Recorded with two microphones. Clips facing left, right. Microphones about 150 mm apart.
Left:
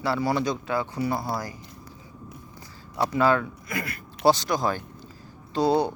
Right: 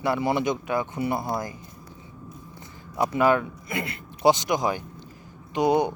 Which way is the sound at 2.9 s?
15° right (ahead or behind).